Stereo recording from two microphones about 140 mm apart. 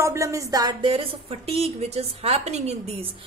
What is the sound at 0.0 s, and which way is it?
Music, 20° right (ahead or behind).